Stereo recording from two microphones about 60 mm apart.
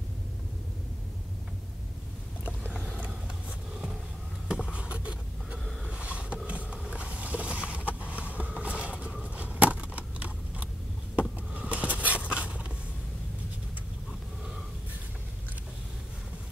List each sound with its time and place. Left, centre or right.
4.7 s vehicle: right
5.9 s roaring cats: right
8.1 s vehicle: right
9.2 s a sound: right